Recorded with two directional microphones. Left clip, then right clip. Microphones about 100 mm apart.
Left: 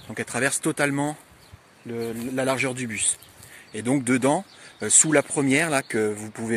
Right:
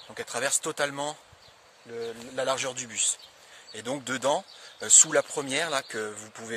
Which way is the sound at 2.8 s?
30° right (ahead or behind).